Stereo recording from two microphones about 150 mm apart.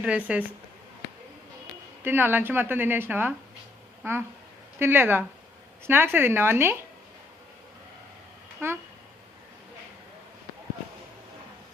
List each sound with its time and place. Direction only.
0.0 s a woman's voice: 10° right (ahead or behind)
2.0 s a woman's voice: 15° right (ahead or behind)
4.8 s a woman's voice: 15° right (ahead or behind)
8.6 s a woman's voice: 15° right (ahead or behind)